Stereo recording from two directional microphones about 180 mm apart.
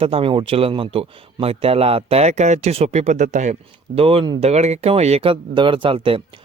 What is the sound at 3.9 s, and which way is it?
Speech, 30° right (ahead or behind).